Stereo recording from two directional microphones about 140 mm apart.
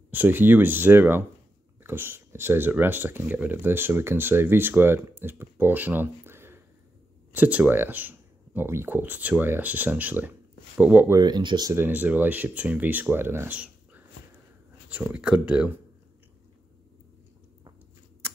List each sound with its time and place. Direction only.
0.1 s speech: 15° right (ahead or behind)
11.1 s speech: 30° right (ahead or behind)
11.7 s speech: 15° right (ahead or behind)